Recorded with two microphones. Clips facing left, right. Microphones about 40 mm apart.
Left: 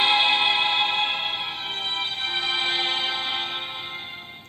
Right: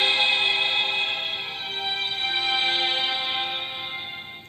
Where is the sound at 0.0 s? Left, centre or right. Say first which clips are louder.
Left 2 dB; centre.